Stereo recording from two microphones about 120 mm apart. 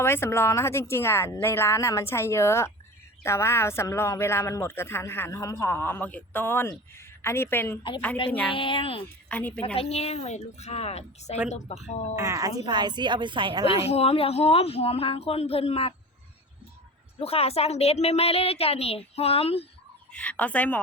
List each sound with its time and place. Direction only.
0.0 s a woman's voice: 20° left (ahead or behind)
8.5 s a woman's voice: 45° left (ahead or behind)
9.3 s speech: 15° left (ahead or behind)
9.7 s a woman's voice: 60° left (ahead or behind)
12.1 s speech: 25° right (ahead or behind); by 13.7 s 45° right (ahead or behind)
13.7 s a woman's voice: 55° left (ahead or behind)
17.2 s a woman's voice: 55° left (ahead or behind)
20.1 s speech: 10° left (ahead or behind)